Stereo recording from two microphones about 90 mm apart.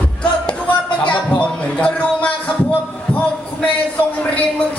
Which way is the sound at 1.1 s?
15° left (ahead or behind).